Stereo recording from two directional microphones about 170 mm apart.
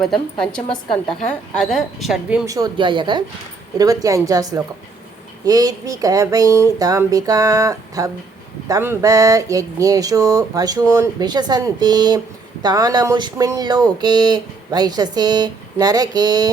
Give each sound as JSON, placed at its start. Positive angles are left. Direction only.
{"t": 0.0, "sound": "a woman's voice", "side_deg": 0}
{"t": 2.5, "sound": "speech", "side_deg": -25}